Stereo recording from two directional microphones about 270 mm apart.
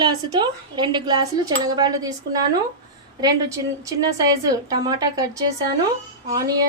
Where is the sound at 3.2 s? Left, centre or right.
Centre.